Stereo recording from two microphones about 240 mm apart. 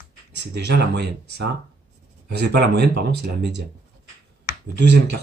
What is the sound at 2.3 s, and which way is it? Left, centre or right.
Speech, right.